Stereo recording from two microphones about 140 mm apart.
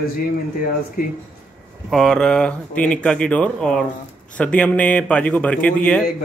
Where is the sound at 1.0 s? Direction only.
90° left.